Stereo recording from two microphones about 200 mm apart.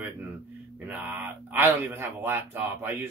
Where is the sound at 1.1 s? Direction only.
10° right (ahead or behind).